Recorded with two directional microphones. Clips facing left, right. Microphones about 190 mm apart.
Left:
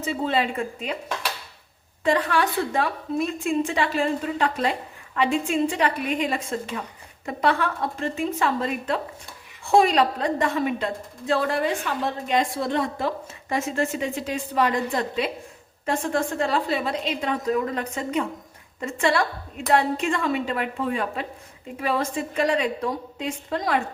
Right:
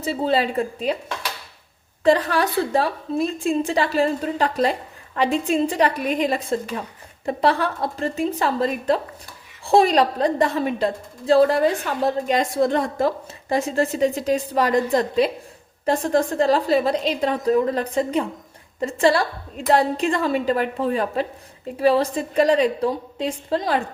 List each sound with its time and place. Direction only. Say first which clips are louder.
0.0 s a woman's voice: right 3 dB; 35° right (ahead or behind)
2.0 s a woman's voice: right 4 dB; 35° right (ahead or behind)